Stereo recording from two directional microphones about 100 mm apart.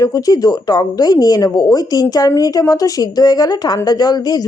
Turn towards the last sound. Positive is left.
turn(degrees=45)  # may be behind; listen again after turning